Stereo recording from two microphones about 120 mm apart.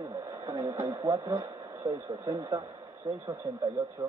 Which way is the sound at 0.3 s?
25° right (ahead or behind).